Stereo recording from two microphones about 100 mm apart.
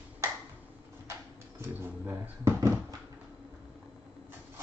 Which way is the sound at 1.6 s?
20° right (ahead or behind).